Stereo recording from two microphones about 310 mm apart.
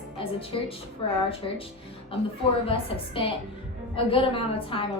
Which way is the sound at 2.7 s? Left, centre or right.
Centre.